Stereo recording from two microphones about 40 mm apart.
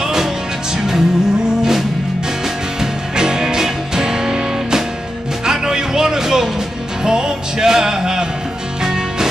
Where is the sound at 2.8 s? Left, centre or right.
Centre.